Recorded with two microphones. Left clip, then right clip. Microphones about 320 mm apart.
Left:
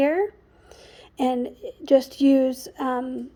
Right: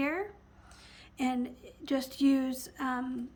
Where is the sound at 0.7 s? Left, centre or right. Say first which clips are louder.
Left 7 dB; centre.